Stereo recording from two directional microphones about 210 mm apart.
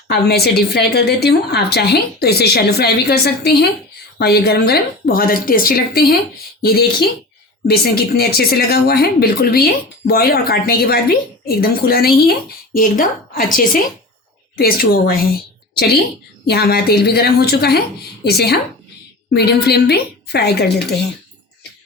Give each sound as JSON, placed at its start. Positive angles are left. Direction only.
{"t": 0.1, "sound": "a woman's voice", "side_deg": 50}